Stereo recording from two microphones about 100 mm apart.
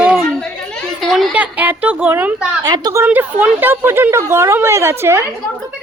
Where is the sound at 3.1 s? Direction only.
15° right (ahead or behind).